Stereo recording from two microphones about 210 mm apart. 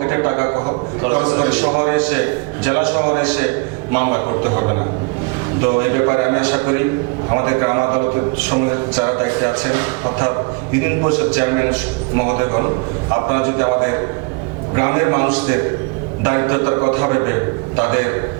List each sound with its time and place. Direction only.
0.0 s a man's voice: 20° right (ahead or behind)